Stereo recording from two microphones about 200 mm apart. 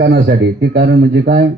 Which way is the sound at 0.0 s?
55° right (ahead or behind).